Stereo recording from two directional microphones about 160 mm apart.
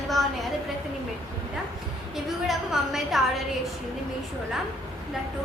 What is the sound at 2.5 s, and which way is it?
Speech, centre (ahead or behind).